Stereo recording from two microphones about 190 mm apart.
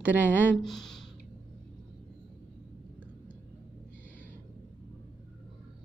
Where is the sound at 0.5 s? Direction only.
Centre (ahead or behind).